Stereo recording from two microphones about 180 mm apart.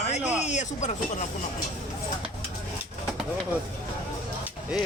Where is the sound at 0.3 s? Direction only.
40° left (ahead or behind).